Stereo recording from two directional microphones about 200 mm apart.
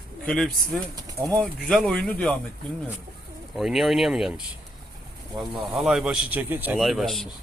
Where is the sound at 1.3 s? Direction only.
Centre (ahead or behind).